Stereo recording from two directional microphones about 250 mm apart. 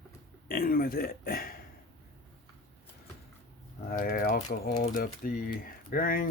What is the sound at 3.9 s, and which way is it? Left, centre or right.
Speech, left.